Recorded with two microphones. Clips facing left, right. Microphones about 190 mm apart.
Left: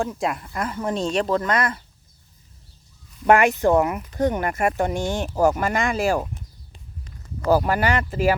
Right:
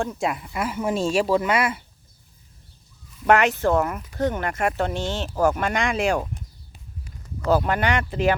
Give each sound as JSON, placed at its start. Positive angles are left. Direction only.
{"t": 0.0, "sound": "speech", "side_deg": 0}
{"t": 3.2, "sound": "speech", "side_deg": 10}
{"t": 7.4, "sound": "speech", "side_deg": 5}